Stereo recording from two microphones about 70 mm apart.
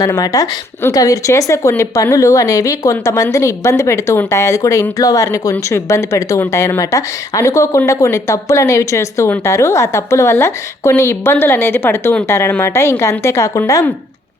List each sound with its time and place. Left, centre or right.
0.0 s a woman's voice: left